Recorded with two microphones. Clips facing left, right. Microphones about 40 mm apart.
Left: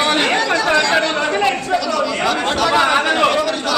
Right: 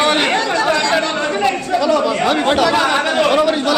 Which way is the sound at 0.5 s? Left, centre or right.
Centre.